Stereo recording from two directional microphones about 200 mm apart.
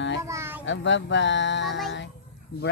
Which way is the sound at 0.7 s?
65° left (ahead or behind).